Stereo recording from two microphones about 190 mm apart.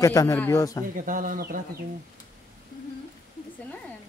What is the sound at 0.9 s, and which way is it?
Speech, 45° right (ahead or behind).